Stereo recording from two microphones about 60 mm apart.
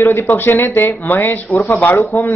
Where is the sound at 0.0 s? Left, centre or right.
Left.